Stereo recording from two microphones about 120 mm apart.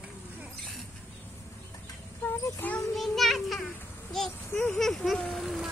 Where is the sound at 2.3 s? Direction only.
15° left (ahead or behind).